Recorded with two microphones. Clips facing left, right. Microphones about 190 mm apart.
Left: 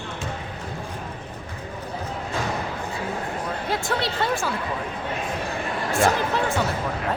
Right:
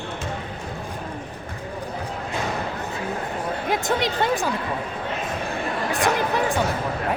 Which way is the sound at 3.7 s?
15° right (ahead or behind).